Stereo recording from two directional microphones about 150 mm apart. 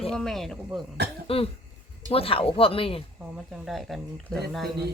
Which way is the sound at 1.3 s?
40° left (ahead or behind).